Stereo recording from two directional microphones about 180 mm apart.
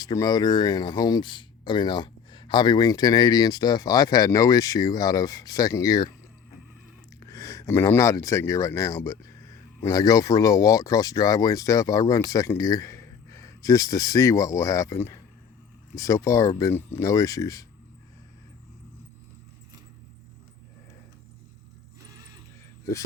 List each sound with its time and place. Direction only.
0.0 s speech: 20° left (ahead or behind)
7.3 s speech: 15° left (ahead or behind)